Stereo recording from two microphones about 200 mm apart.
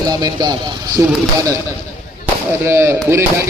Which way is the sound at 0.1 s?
20° right (ahead or behind).